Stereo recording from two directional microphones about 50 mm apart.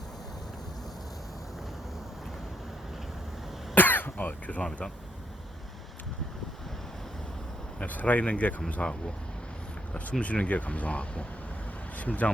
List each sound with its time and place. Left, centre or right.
3.8 s cough: left
7.8 s speech: left